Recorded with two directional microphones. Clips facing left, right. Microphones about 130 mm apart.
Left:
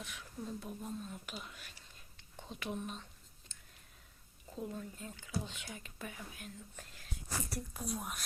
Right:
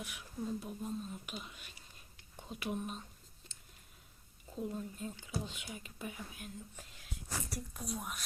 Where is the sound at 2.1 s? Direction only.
10° right (ahead or behind).